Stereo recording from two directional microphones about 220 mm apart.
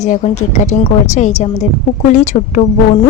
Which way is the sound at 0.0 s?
30° left (ahead or behind).